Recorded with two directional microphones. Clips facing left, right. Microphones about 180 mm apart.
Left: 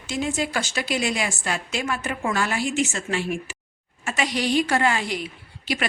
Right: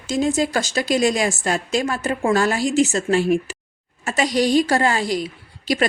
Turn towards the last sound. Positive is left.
turn(degrees=-40)  # may be behind; listen again after turning